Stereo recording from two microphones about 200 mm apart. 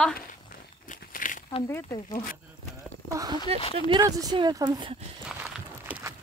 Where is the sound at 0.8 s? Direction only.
40° left (ahead or behind).